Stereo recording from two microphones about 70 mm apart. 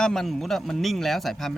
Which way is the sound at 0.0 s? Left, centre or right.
Centre.